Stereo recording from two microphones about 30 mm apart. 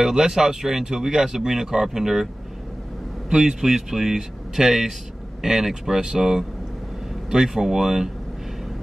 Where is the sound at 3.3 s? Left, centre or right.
Right.